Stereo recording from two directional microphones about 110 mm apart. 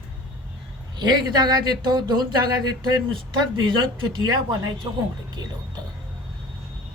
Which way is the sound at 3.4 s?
45° right (ahead or behind).